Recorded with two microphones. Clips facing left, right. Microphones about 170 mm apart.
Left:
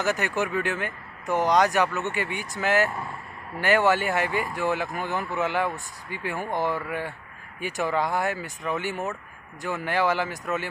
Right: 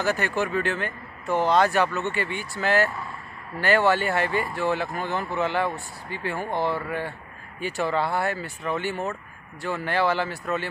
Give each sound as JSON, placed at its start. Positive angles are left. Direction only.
{"t": 0.0, "sound": "speech", "side_deg": 15}